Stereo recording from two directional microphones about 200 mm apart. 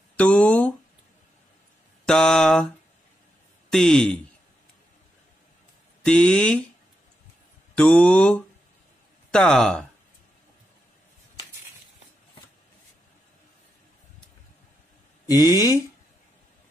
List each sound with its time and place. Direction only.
0.2 s mantra: 5° left (ahead or behind)
2.0 s mantra: 5° left (ahead or behind)
3.7 s mantra: centre (ahead or behind)
6.0 s mantra: 5° left (ahead or behind)
7.7 s mantra: 5° left (ahead or behind)
15.2 s mantra: 20° left (ahead or behind)